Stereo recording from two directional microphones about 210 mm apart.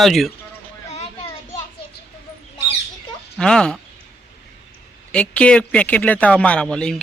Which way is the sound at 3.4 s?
5° left (ahead or behind).